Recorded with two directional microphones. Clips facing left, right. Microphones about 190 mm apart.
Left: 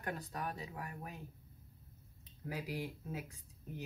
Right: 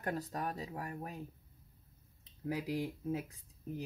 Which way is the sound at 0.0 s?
40° right (ahead or behind).